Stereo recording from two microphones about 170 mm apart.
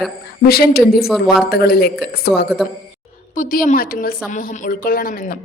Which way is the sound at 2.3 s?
Centre (ahead or behind).